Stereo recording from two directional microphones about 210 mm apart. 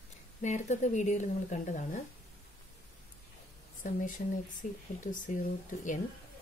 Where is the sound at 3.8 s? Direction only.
40° left (ahead or behind).